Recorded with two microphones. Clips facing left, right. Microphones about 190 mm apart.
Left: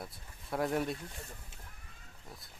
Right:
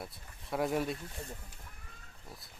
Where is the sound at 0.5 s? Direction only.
Centre (ahead or behind).